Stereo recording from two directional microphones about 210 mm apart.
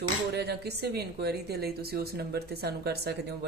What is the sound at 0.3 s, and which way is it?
Speech, 50° right (ahead or behind).